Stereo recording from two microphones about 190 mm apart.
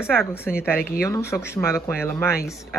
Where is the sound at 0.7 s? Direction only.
15° left (ahead or behind).